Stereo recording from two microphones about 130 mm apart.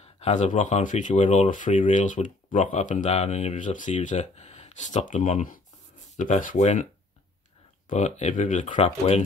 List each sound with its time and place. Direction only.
0.0 s speech: 55° left (ahead or behind)
3.5 s speech: 80° left; by 6.9 s 65° left (ahead or behind)
7.9 s speech: 65° left (ahead or behind)
8.7 s speech: 55° left (ahead or behind)